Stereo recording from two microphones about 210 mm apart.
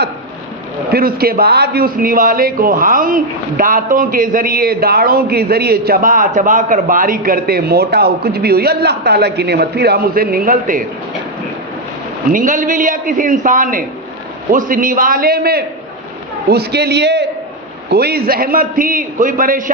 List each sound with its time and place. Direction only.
0.9 s a man's voice: 45° right (ahead or behind)
12.3 s a man's voice: 40° right (ahead or behind)